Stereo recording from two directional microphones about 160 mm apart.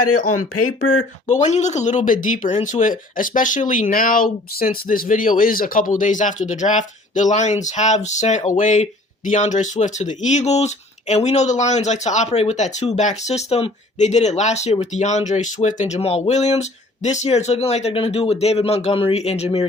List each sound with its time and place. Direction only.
1.3 s speech: 45° left (ahead or behind)